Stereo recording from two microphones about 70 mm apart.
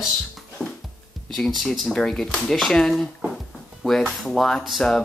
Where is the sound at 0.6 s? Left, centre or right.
Centre.